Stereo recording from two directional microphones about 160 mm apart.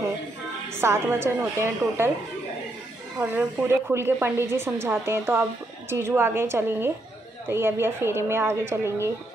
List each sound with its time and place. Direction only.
0.7 s speech: 15° right (ahead or behind)
3.2 s speech: 10° right (ahead or behind)